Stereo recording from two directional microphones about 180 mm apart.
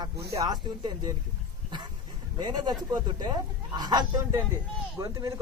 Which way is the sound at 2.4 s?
25° right (ahead or behind).